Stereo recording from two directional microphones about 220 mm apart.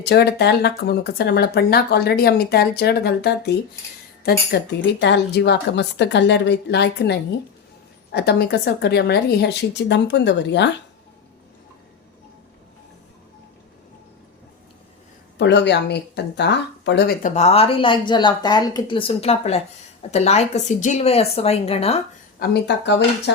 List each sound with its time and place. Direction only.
0.0 s speech: 50° left (ahead or behind)
15.4 s speech: 50° left (ahead or behind)
17.2 s speech: 30° left (ahead or behind)
22.4 s speech: 50° left (ahead or behind)